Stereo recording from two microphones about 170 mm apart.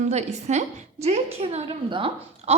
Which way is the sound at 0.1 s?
40° right (ahead or behind).